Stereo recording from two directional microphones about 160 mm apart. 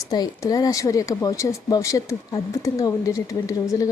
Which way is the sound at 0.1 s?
20° left (ahead or behind).